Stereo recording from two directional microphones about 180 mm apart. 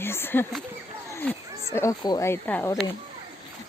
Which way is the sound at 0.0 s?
10° left (ahead or behind).